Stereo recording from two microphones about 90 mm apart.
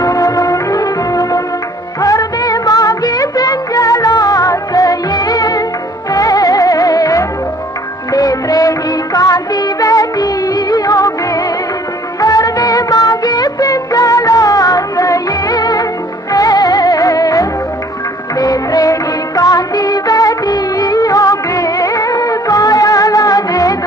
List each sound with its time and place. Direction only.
0.0 s music: 40° left (ahead or behind)
2.0 s music of bollywood: 40° left (ahead or behind)
6.1 s music: 45° left (ahead or behind)
8.1 s music of bollywood: 45° left (ahead or behind)